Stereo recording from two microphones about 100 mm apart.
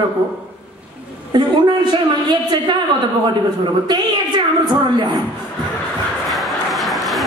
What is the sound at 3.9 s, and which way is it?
A man's voice, 45° right (ahead or behind).